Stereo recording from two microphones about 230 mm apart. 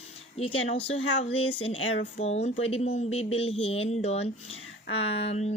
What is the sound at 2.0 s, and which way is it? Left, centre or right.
Speech, left.